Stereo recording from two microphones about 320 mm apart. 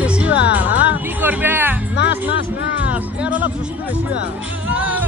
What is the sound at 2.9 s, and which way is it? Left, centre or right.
Speech, centre.